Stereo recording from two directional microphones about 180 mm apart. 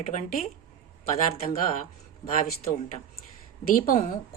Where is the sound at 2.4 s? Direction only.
45° left (ahead or behind).